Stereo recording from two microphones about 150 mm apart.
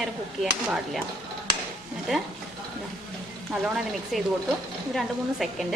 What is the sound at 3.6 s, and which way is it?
Speech, centre (ahead or behind).